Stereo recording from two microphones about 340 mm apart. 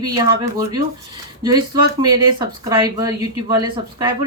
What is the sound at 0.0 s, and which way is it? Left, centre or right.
Speech, centre.